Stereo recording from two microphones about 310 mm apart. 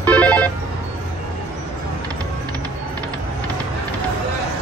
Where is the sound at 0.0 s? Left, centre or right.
Centre.